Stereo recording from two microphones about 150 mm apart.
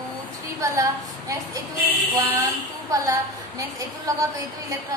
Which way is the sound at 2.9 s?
20° right (ahead or behind).